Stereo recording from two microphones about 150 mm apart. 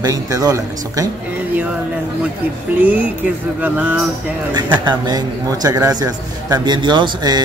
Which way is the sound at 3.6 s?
10° right (ahead or behind).